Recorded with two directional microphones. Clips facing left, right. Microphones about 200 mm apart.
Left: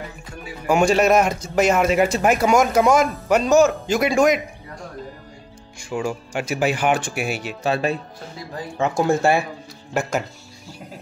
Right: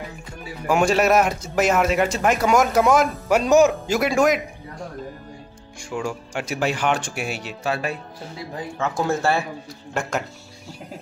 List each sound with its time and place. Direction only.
0.7 s speech: centre (ahead or behind)
3.4 s speech: 15° right (ahead or behind)
5.8 s speech: 5° left (ahead or behind)
7.6 s speech: 25° left (ahead or behind)
9.9 s speech: centre (ahead or behind)